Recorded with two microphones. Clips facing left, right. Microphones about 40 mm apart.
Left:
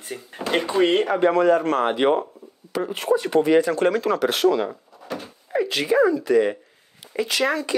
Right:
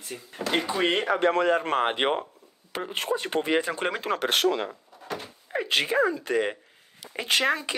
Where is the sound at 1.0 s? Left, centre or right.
Right.